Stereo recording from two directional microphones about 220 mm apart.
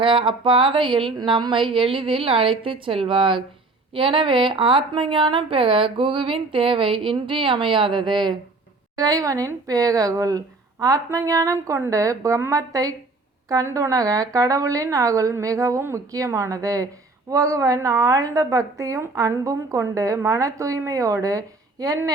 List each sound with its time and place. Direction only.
0.0 s a woman's voice: 25° right (ahead or behind)